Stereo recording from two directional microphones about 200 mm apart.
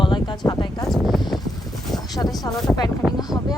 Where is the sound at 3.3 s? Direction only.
15° left (ahead or behind).